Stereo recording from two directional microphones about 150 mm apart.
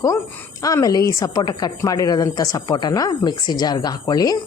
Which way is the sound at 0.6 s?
25° left (ahead or behind).